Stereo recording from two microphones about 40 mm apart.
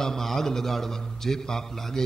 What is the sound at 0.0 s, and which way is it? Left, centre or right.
A man's voice, centre.